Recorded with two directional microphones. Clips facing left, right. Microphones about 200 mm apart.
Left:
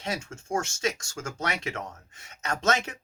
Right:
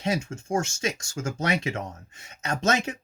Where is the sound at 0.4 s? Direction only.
10° right (ahead or behind).